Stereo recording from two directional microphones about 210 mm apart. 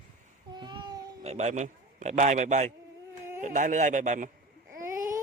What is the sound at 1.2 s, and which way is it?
Speech, 30° right (ahead or behind).